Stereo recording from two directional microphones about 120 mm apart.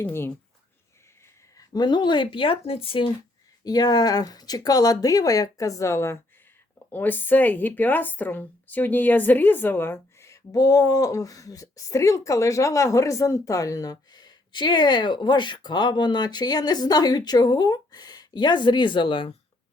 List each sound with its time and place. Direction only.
0.0 s a woman's voice: 20° left (ahead or behind)
1.5 s speech: 35° left (ahead or behind)
3.6 s a woman's voice: 35° left (ahead or behind)